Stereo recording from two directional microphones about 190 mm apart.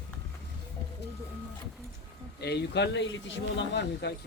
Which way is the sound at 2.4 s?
60° left (ahead or behind).